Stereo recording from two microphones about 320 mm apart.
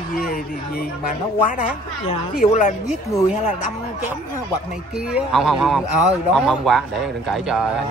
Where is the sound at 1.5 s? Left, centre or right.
Left.